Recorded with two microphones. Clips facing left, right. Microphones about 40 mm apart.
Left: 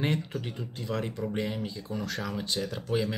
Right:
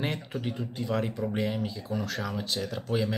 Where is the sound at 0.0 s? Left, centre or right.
Centre.